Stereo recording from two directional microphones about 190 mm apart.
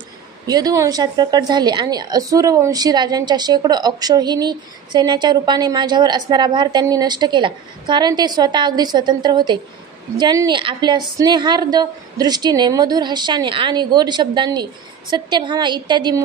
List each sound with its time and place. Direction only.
0.5 s speech: 20° right (ahead or behind)